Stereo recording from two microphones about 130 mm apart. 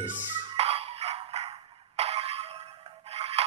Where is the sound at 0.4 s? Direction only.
50° right (ahead or behind).